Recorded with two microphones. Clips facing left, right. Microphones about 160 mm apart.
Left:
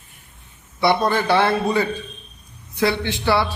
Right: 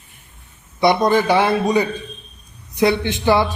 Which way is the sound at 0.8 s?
15° right (ahead or behind).